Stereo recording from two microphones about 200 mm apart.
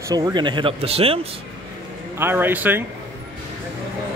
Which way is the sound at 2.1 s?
10° right (ahead or behind).